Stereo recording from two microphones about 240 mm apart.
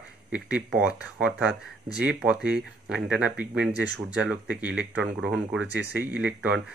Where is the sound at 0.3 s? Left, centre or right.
Centre.